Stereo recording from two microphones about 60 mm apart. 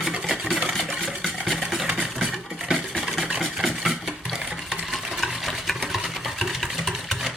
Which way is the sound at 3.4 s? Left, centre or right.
Centre.